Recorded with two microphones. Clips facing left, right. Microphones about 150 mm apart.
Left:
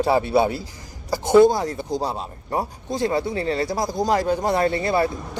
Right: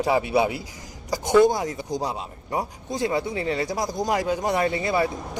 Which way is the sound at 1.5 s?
20° right (ahead or behind).